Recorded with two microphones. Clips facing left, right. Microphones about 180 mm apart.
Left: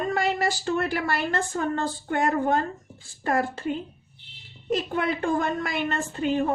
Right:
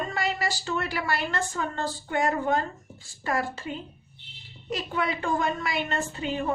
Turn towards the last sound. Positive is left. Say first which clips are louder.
# left 4 dB
turn(degrees=50)  # may be behind; listen again after turning